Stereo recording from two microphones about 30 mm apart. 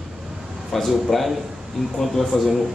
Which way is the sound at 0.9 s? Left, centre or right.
Centre.